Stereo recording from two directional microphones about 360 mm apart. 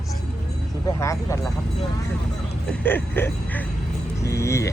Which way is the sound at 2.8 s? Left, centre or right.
Centre.